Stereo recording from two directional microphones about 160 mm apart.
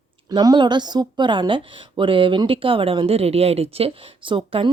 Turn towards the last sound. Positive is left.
turn(degrees=-30)  # may be behind; listen again after turning